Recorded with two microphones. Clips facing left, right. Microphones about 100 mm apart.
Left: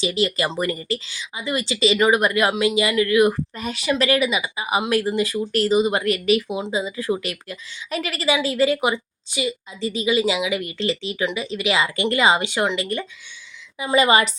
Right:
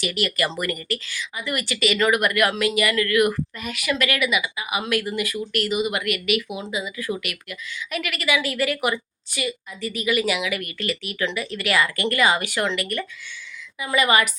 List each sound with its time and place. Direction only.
0.0 s speech: 25° left (ahead or behind)